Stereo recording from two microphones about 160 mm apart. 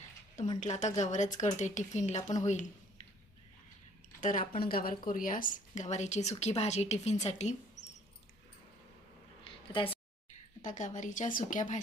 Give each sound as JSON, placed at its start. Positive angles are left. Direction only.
{"t": 0.6, "sound": "speech", "side_deg": 45}
{"t": 4.2, "sound": "speech", "side_deg": 55}
{"t": 9.7, "sound": "a woman's voice", "side_deg": 35}
{"t": 10.6, "sound": "speech", "side_deg": 50}